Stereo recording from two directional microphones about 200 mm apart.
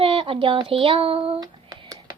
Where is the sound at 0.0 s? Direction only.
25° right (ahead or behind).